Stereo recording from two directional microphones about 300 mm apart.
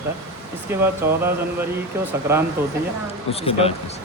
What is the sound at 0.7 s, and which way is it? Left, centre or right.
Speech, centre.